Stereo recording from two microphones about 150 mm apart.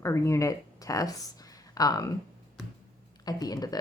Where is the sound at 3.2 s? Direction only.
25° left (ahead or behind).